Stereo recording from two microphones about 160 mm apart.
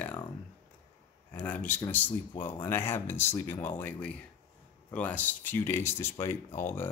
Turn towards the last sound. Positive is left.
turn(degrees=15)  # may be behind; listen again after turning